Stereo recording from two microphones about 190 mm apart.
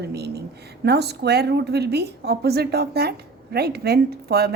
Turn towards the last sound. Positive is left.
turn(degrees=-55)  # may be behind; listen again after turning